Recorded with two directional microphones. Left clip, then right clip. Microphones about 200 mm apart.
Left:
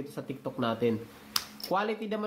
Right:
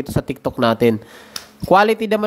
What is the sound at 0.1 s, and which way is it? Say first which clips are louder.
Speech: right 15 dB; 55° right (ahead or behind).